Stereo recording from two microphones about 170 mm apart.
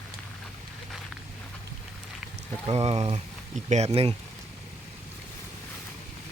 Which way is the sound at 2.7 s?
35° right (ahead or behind).